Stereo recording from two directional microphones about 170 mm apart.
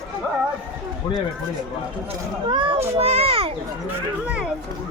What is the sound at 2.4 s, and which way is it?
A child's voice, 30° right (ahead or behind).